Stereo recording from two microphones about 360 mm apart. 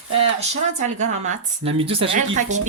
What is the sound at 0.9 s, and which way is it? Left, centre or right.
Speech, centre.